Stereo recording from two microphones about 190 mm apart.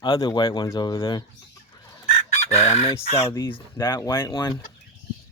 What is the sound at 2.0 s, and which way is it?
Chicken, 35° left (ahead or behind).